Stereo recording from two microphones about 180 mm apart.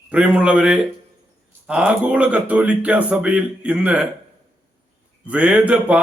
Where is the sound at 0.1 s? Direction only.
5° right (ahead or behind).